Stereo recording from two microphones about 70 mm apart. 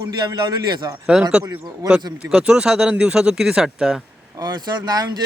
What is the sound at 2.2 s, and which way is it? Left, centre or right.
Speech, centre.